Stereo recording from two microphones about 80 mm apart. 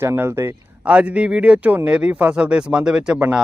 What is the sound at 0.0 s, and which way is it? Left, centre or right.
Speech, right.